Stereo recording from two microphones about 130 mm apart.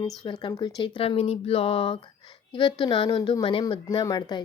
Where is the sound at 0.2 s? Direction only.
40° left (ahead or behind).